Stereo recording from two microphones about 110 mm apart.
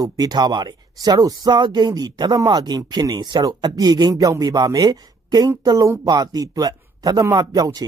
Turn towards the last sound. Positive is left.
turn(degrees=-35)  # may be behind; listen again after turning